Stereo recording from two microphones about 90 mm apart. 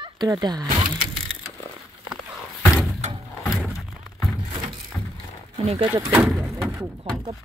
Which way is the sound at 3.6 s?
Centre (ahead or behind).